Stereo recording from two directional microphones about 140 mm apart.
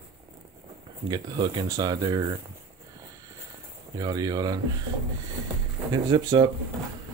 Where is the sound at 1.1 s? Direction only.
30° right (ahead or behind).